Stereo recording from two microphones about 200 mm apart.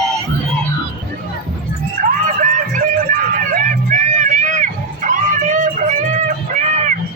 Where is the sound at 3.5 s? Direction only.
40° right (ahead or behind).